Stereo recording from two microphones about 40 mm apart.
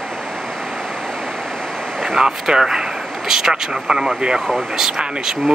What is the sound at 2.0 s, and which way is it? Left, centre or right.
Speech, centre.